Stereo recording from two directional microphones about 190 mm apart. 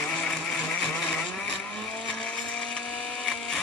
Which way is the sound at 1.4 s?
5° left (ahead or behind).